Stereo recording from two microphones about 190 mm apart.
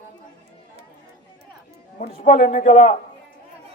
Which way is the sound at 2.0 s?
45° left (ahead or behind).